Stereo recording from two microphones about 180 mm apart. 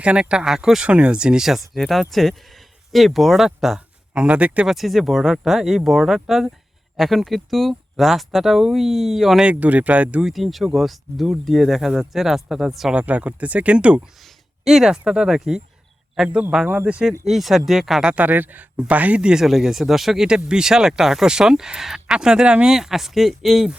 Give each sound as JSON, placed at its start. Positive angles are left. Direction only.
{"t": 0.0, "sound": "speech", "side_deg": -5}